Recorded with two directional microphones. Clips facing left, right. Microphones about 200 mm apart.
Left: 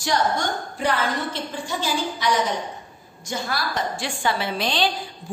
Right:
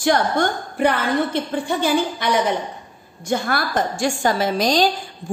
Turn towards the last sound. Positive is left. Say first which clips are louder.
# right 6 dB
turn(degrees=-40)  # may be behind; listen again after turning